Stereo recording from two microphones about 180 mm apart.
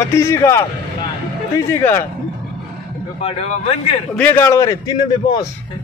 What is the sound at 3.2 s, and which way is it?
Speech, 30° left (ahead or behind).